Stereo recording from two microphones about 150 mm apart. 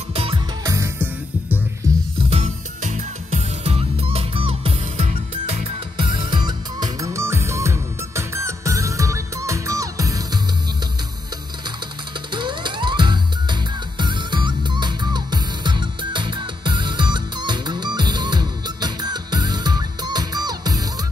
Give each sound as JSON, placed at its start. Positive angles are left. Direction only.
{"t": 0.1, "sound": "music", "side_deg": -40}
{"t": 0.7, "sound": "music", "side_deg": -20}
{"t": 2.2, "sound": "music", "side_deg": -45}
{"t": 5.9, "sound": "music", "side_deg": -30}
{"t": 12.3, "sound": "music", "side_deg": -30}